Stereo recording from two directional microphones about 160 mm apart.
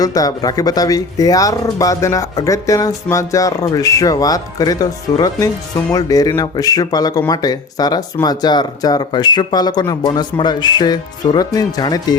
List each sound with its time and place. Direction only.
0.0 s speech: 20° left (ahead or behind)